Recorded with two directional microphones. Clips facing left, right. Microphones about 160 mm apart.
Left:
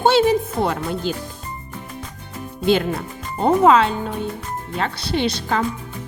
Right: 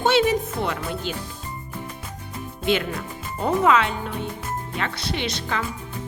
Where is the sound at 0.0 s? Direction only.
35° left (ahead or behind).